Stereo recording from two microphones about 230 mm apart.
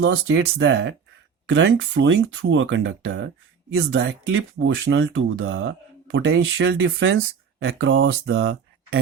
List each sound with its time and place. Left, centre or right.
0.0 s speech: right